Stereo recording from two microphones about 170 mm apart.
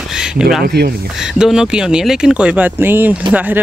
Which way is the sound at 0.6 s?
70° right (ahead or behind).